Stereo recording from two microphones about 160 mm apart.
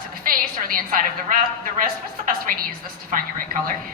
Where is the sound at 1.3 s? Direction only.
55° right (ahead or behind).